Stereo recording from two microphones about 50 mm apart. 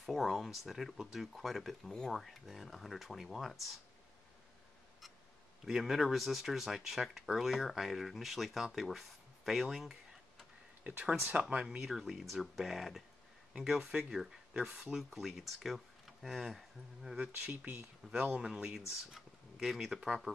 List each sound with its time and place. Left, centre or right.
0.0 s speech: centre
1.9 s speech: centre
2.1 s speech: centre
5.7 s speech: centre
10.8 s speech: right
11.8 s speech: centre
13.5 s speech: centre
17.2 s speech: right
17.6 s speech: right
18.3 s speech: centre
19.5 s speech: centre